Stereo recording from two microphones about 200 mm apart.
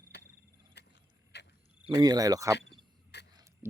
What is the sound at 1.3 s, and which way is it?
Cricket, 55° left (ahead or behind).